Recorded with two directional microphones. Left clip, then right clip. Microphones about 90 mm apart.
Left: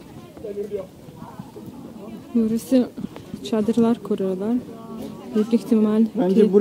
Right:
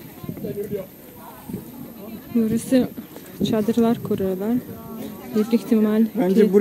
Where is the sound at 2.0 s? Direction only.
10° left (ahead or behind).